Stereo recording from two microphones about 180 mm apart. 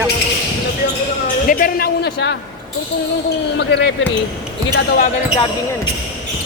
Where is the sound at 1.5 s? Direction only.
55° left (ahead or behind).